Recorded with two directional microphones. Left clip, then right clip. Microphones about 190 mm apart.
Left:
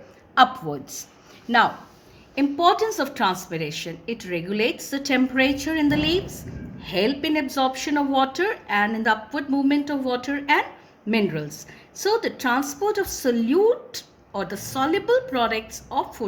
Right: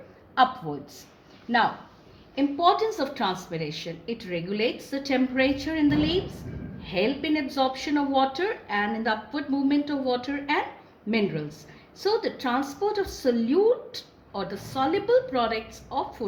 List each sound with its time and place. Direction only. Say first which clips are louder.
0.3 s a woman's voice: left 4 dB; 45° left (ahead or behind)